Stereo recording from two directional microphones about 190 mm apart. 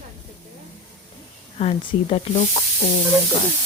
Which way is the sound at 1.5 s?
30° left (ahead or behind).